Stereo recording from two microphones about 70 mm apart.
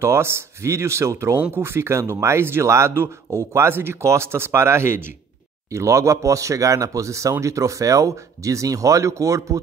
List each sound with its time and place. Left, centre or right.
0.0 s speech: right
5.7 s speech: right